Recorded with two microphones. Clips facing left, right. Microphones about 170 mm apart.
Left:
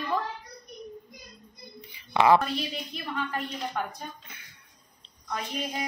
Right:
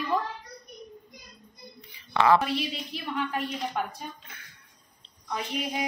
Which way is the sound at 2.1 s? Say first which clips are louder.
Left 1 dB; 15° left (ahead or behind).